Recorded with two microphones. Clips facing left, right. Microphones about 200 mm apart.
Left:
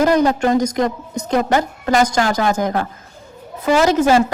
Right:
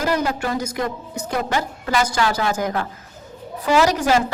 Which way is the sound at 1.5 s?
45° left (ahead or behind).